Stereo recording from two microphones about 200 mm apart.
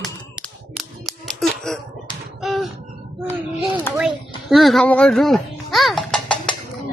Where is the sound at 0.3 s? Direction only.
Centre (ahead or behind).